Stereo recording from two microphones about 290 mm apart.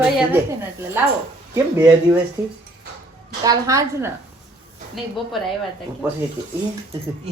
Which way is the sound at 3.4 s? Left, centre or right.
Centre.